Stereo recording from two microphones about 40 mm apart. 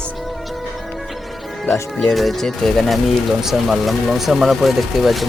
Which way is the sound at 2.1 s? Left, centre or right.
Centre.